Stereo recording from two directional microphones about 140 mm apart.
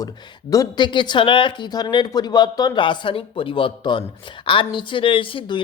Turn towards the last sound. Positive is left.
turn(degrees=40)  # may be behind; listen again after turning